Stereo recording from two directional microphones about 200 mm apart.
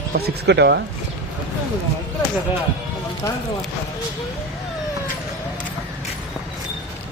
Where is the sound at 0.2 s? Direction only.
55° right (ahead or behind).